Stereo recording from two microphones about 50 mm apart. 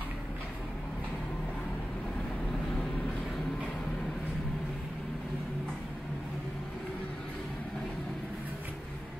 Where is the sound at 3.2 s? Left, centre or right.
Centre.